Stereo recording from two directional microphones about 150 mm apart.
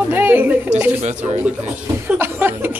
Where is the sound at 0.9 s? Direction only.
50° right (ahead or behind).